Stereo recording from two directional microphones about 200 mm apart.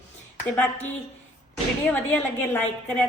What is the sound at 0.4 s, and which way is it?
Speech, 10° left (ahead or behind).